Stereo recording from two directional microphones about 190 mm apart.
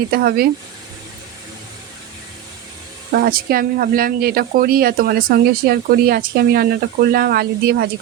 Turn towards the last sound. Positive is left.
turn(degrees=-55)  # may be behind; listen again after turning